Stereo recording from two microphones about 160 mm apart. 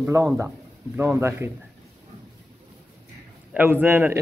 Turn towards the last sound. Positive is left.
turn(degrees=-15)  # may be behind; listen again after turning